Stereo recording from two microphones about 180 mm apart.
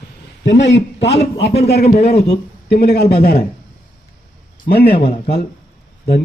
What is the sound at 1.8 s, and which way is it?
Speech, 35° left (ahead or behind).